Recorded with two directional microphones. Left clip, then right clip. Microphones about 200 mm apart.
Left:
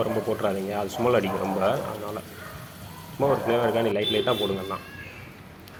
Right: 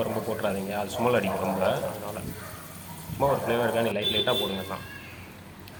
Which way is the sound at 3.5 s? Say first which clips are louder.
Left 2 dB; 5° left (ahead or behind).